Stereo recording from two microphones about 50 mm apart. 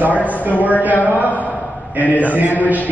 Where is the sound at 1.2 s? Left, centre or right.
Left.